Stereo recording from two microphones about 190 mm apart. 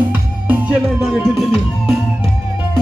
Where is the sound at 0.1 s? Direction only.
10° right (ahead or behind).